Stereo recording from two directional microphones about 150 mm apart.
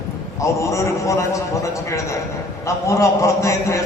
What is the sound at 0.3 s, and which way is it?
A man's voice, 20° left (ahead or behind).